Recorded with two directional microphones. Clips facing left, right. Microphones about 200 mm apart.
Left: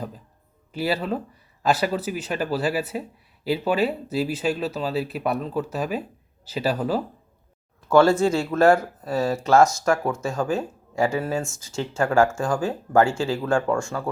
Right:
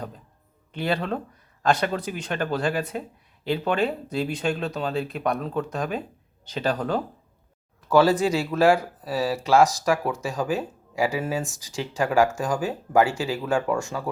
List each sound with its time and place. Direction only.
0.7 s speech: 5° left (ahead or behind)
8.2 s speech: 10° right (ahead or behind)